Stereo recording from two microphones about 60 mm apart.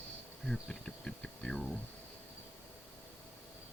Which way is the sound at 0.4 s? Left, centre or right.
Centre.